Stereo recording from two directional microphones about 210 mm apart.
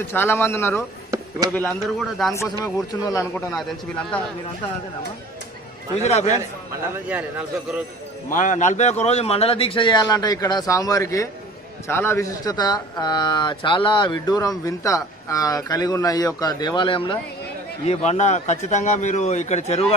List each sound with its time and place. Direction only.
0.0 s a man's voice: 10° left (ahead or behind)
2.6 s a man's voice: 15° left (ahead or behind)
5.9 s a man's voice: 30° left (ahead or behind)
7.1 s a man's voice: 5° right (ahead or behind)
8.3 s a man's voice: 35° left (ahead or behind)